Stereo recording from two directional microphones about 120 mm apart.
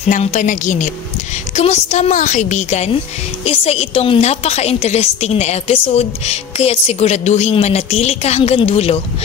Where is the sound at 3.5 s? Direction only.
55° left (ahead or behind).